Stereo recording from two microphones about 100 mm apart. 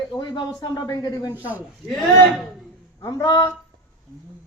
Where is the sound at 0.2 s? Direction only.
50° left (ahead or behind).